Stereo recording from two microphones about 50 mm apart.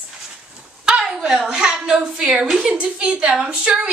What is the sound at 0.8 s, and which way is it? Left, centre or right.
A woman's voice, centre.